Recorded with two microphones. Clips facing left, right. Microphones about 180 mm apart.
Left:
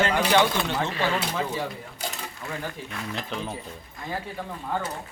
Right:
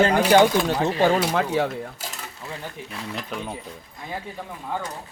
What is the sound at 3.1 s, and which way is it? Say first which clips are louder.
Speech: right 1 dB; centre (ahead or behind).